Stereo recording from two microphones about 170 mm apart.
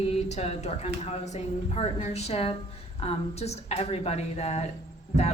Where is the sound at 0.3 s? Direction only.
40° left (ahead or behind).